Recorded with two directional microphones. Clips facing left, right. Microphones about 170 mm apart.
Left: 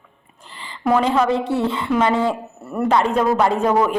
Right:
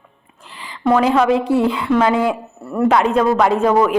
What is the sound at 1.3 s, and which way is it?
Speech, 25° left (ahead or behind).